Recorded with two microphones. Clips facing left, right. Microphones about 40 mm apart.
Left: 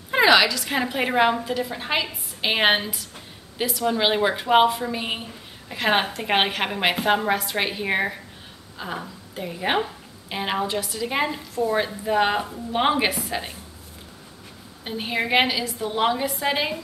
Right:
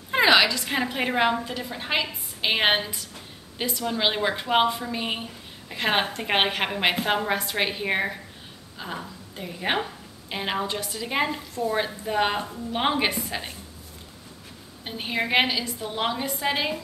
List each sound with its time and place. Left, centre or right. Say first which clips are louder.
0.1 s a sound: left 2 dB; centre
0.7 s a woman's voice: left 2 dB; centre
14.9 s speech: left 2 dB; centre